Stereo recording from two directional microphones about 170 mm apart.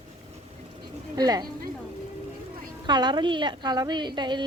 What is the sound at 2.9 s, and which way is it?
A woman's voice, 25° right (ahead or behind).